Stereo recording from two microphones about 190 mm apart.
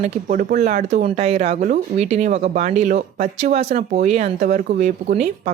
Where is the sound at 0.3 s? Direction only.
45° right (ahead or behind).